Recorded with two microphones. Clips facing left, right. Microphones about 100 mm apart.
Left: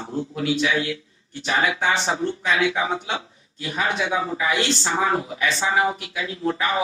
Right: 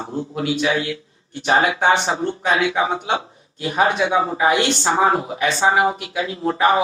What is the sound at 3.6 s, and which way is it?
A woman's voice, 40° right (ahead or behind).